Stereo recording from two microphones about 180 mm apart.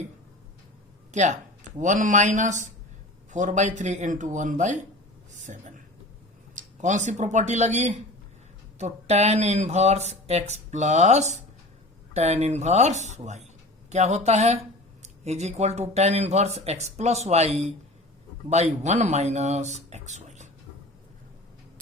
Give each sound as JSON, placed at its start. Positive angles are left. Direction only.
{"t": 1.1, "sound": "speech", "side_deg": -40}
{"t": 5.5, "sound": "a sound", "side_deg": -45}
{"t": 6.6, "sound": "speech", "side_deg": -40}